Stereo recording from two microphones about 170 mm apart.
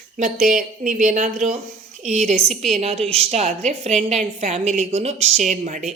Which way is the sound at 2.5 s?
Centre (ahead or behind).